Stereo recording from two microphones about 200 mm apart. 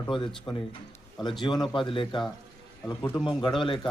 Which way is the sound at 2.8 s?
10° left (ahead or behind).